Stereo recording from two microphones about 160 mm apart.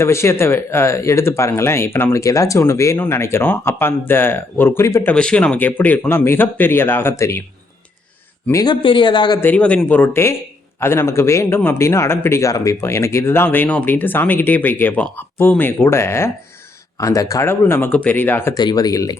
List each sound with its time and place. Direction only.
0.0 s a man's voice: 15° left (ahead or behind)
5.1 s a man's voice: 5° left (ahead or behind)
8.6 s speech: 30° left (ahead or behind)
9.4 s a man's voice: 10° left (ahead or behind)